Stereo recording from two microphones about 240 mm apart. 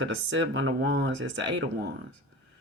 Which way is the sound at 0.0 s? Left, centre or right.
Right.